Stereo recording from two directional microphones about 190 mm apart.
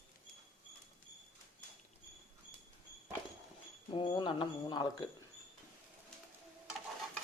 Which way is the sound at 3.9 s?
25° left (ahead or behind).